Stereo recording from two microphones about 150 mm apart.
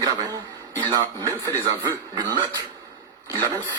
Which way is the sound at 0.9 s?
25° right (ahead or behind).